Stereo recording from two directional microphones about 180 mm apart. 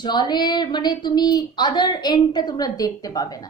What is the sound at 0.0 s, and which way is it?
A woman's voice, 25° left (ahead or behind).